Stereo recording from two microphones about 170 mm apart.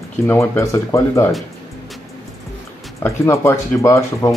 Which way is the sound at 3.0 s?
15° left (ahead or behind).